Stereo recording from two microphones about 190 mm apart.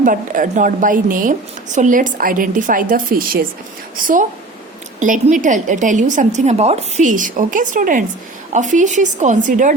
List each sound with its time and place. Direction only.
0.0 s a woman's voice: 45° right (ahead or behind)